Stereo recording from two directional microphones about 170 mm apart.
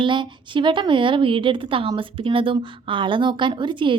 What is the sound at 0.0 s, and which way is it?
A woman's voice, 30° right (ahead or behind).